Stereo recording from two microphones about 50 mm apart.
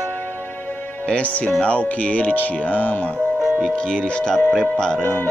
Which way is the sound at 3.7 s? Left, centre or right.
Centre.